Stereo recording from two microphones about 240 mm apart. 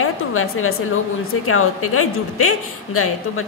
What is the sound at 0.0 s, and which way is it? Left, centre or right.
A woman's voice, left.